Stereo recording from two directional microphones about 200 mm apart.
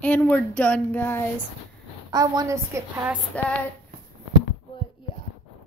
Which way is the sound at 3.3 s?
5° left (ahead or behind).